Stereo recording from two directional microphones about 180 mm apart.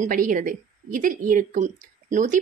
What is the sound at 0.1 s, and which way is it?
A woman's voice, 50° right (ahead or behind).